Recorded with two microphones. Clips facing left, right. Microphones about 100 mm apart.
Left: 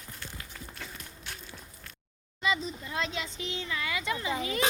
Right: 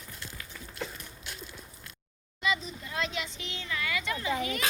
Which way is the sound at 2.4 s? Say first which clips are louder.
Left 1 dB; 25° left (ahead or behind).